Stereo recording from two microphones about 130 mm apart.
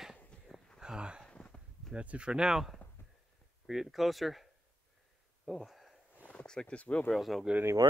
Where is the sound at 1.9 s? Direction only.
10° right (ahead or behind).